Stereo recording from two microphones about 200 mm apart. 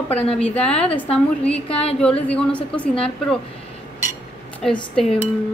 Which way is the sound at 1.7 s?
30° left (ahead or behind).